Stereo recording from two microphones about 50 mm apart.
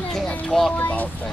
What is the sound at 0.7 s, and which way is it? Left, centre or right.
Speech, left.